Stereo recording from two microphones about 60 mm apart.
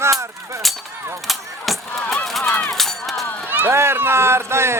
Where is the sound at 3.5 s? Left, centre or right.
Right.